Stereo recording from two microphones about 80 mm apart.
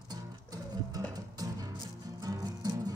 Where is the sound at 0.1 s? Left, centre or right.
Right.